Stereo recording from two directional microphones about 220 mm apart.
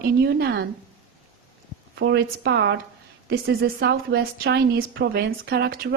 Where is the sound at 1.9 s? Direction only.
50° right (ahead or behind).